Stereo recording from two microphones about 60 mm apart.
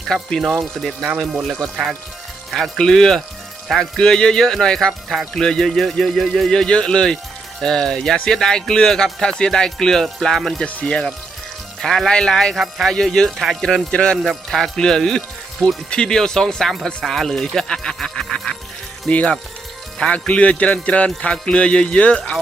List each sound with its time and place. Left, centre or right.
0.1 s speech: centre
4.9 s speech: centre
12.5 s speech: centre
12.9 s speech: centre
13.9 s speech: centre
14.2 s speech: centre
19.1 s speech: left